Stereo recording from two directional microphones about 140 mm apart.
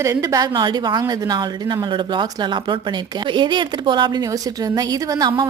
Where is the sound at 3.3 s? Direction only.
35° right (ahead or behind).